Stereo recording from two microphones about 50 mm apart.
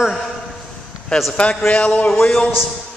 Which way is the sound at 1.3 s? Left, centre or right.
Left.